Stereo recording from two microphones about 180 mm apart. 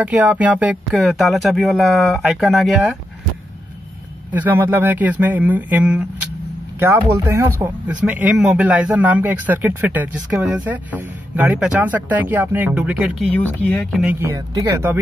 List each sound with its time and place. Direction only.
0.0 s speech: 10° right (ahead or behind)
4.3 s speech: 10° right (ahead or behind)
8.0 s speech: 5° right (ahead or behind)
13.3 s speech: 10° left (ahead or behind)
14.0 s speech: 15° right (ahead or behind)